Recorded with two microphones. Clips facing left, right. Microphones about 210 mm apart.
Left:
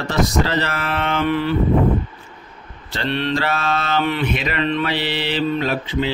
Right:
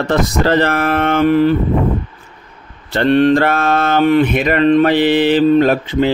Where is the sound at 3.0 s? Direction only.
50° right (ahead or behind).